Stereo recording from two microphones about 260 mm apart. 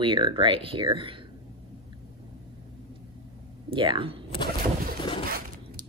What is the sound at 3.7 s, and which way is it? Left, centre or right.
Speech, centre.